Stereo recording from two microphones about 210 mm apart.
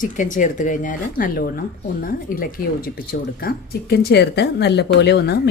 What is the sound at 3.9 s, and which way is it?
Speech, 50° left (ahead or behind).